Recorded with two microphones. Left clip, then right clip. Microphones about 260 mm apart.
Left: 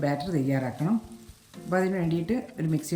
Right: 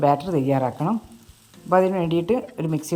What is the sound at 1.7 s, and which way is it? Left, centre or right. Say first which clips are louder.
Speech: right 8 dB; centre.